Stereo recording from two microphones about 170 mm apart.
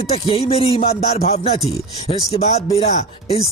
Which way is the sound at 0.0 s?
35° left (ahead or behind).